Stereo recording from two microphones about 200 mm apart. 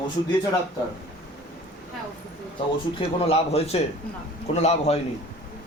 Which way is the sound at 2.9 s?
30° left (ahead or behind).